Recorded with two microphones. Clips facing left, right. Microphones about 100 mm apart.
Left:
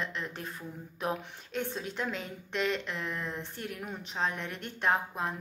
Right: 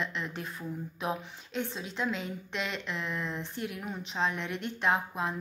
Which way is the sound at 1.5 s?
50° left (ahead or behind).